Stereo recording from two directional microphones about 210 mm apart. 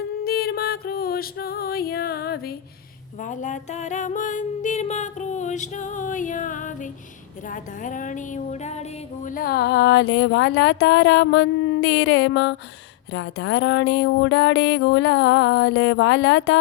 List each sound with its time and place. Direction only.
0.3 s music: 45° left (ahead or behind)
3.2 s music: 35° left (ahead or behind); by 12.5 s 60° left (ahead or behind)
13.1 s a sound: 60° left (ahead or behind)